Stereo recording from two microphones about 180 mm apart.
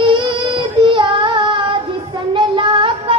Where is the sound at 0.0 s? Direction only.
30° right (ahead or behind).